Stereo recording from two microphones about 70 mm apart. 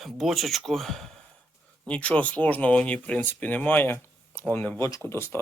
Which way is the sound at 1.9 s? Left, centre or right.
Centre.